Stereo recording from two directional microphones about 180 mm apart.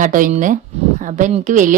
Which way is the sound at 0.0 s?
45° right (ahead or behind).